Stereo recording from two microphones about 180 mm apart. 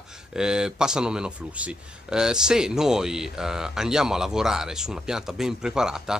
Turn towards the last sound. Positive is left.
turn(degrees=-5)  # may be behind; listen again after turning